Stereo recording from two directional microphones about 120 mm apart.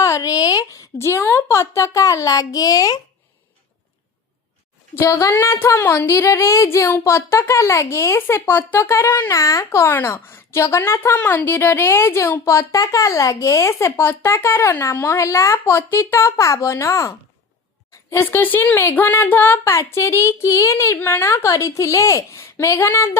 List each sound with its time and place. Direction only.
0.0 s a woman's voice: 30° left (ahead or behind)
4.9 s a woman's voice: 25° left (ahead or behind)